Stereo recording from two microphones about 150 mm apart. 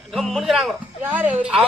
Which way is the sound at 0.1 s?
Centre (ahead or behind).